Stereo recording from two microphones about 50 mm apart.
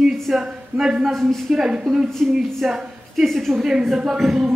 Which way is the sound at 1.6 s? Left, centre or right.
Centre.